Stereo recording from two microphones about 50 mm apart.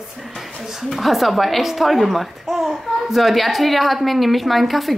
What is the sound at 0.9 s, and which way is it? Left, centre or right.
A child's voice, centre.